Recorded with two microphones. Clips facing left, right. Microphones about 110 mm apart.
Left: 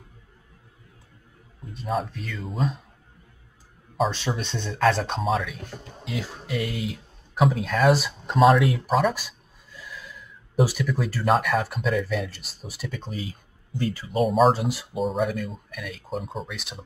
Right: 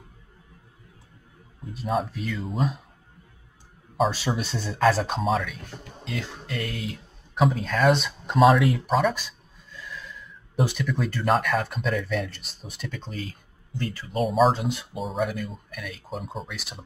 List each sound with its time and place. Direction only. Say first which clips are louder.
1.7 s speech: right 1 dB; 5° right (ahead or behind)
3.9 s speech: right 1 dB; 5° right (ahead or behind); by 14.1 s 15° left (ahead or behind)
14.1 s speech: left 2 dB; centre (ahead or behind)